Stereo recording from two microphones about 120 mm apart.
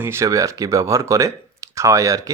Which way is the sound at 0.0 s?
20° right (ahead or behind).